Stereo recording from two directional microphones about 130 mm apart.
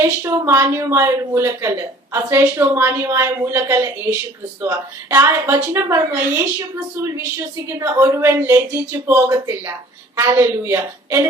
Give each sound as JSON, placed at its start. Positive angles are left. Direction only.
{"t": 0.2, "sound": "a woman's voice", "side_deg": -25}
{"t": 9.1, "sound": "a woman's voice", "side_deg": -30}
{"t": 10.2, "sound": "a woman's voice", "side_deg": -20}